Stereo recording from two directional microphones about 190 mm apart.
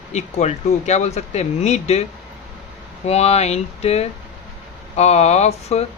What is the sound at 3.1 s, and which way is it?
Speech, 35° left (ahead or behind).